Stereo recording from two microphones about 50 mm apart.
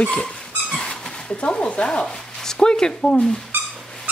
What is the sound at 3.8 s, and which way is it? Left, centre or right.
Dog, centre.